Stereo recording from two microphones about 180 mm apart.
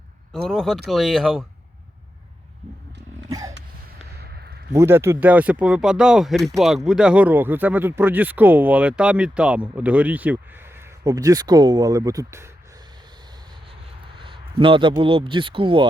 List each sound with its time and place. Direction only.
0.4 s speech: centre (ahead or behind)
3.2 s a sound: 20° right (ahead or behind)
4.7 s speech: 15° right (ahead or behind)
11.0 s speech: 20° right (ahead or behind)
14.2 s speech: 30° right (ahead or behind)